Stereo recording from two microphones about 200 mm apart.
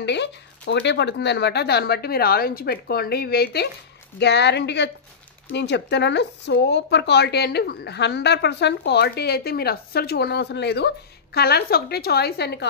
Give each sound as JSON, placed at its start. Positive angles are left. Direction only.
{"t": 0.0, "sound": "speech", "side_deg": 60}